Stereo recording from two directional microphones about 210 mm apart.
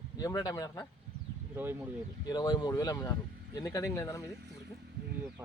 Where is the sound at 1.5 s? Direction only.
10° right (ahead or behind).